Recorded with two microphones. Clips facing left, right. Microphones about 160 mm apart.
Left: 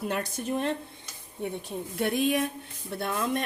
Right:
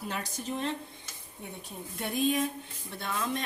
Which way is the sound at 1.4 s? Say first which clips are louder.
Left 9 dB; 75° left (ahead or behind).